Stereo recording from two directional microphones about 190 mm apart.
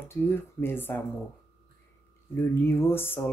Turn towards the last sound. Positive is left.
turn(degrees=10)  # may be behind; listen again after turning